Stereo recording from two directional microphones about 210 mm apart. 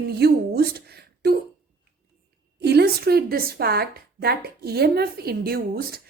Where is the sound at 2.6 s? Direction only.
50° right (ahead or behind).